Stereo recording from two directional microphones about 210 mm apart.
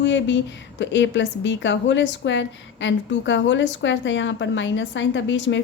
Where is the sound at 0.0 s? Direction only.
60° left (ahead or behind).